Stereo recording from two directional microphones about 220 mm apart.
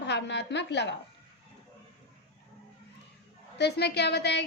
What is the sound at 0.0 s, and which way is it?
Speech, 50° left (ahead or behind).